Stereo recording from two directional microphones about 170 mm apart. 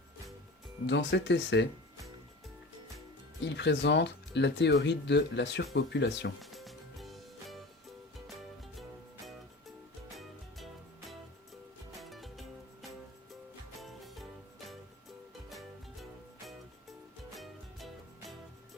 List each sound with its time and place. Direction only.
0.9 s speech: 90° left
3.4 s speech: 90° left
6.4 s music: centre (ahead or behind)
11.9 s music: centre (ahead or behind)
13.7 s music: centre (ahead or behind)
15.4 s music: centre (ahead or behind)
17.3 s music: centre (ahead or behind)